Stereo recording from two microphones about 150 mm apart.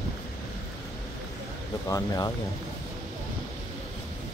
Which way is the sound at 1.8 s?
20° left (ahead or behind).